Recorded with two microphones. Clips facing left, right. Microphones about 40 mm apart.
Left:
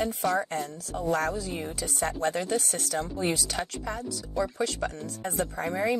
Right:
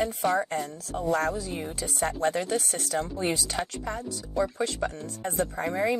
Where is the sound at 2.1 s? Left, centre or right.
Right.